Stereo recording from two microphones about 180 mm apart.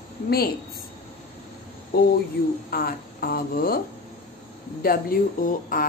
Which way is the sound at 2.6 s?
55° left (ahead or behind).